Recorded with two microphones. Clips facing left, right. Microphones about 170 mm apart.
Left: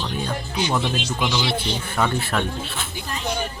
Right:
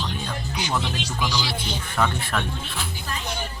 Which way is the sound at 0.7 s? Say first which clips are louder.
Left 3 dB; 25° left (ahead or behind).